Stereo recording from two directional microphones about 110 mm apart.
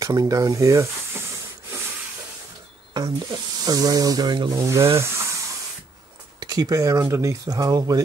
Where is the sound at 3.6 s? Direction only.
35° right (ahead or behind).